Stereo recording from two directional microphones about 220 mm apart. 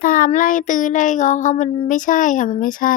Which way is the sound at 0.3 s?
35° left (ahead or behind).